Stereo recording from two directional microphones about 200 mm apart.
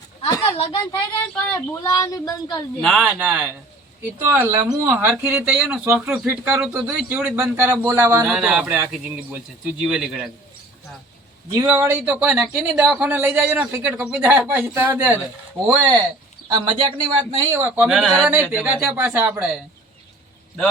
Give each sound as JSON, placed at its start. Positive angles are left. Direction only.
{"t": 0.5, "sound": "speech", "side_deg": 30}
{"t": 1.4, "sound": "speech", "side_deg": 10}
{"t": 2.8, "sound": "speech", "side_deg": 0}
{"t": 11.5, "sound": "speech", "side_deg": -15}
{"t": 17.5, "sound": "speech", "side_deg": -10}